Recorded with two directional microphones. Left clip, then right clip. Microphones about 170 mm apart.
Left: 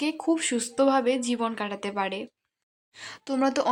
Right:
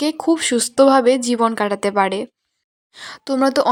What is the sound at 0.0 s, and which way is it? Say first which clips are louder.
Speech: right 8 dB; 25° right (ahead or behind).